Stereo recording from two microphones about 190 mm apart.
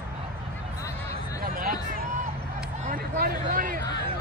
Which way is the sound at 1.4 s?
50° right (ahead or behind).